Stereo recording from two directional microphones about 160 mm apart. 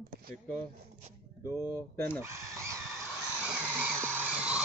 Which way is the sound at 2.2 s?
15° right (ahead or behind).